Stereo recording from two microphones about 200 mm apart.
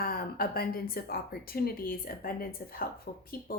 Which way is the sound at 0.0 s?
50° left (ahead or behind).